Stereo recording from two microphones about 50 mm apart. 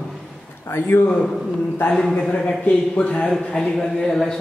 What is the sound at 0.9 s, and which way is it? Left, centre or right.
Speech, left.